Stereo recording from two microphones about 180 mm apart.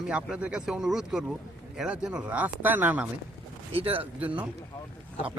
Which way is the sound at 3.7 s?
30° right (ahead or behind).